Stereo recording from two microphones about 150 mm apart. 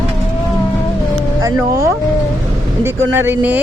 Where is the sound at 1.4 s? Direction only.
25° right (ahead or behind).